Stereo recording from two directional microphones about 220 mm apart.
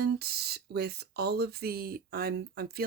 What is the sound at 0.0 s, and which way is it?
Speech, 45° right (ahead or behind).